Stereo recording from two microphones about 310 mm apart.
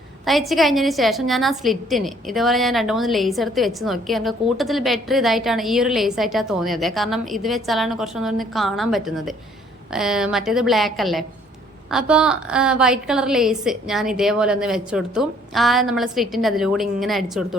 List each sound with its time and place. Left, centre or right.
0.3 s a woman's voice: centre